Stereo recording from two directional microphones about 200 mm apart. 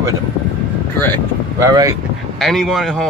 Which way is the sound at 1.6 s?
15° right (ahead or behind).